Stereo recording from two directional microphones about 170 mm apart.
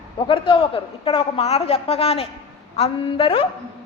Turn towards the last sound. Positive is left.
turn(degrees=30)  # may be behind; listen again after turning